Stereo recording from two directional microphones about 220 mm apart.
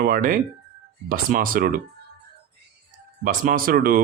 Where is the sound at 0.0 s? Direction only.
40° right (ahead or behind).